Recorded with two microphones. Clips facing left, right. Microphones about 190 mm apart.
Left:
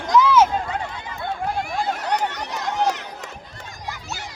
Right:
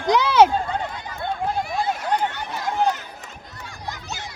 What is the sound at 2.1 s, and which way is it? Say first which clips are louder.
Run: even; 80° left.